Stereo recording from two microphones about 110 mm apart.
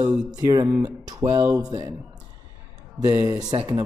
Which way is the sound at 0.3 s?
35° right (ahead or behind).